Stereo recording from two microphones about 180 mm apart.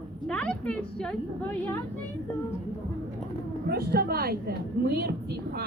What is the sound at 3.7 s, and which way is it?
A woman's voice, 60° right (ahead or behind).